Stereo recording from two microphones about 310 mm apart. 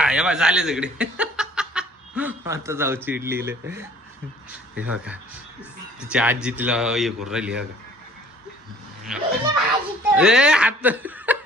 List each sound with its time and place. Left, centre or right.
0.0 s speech: centre
4.8 s a man's voice: centre
9.0 s a man's voice: centre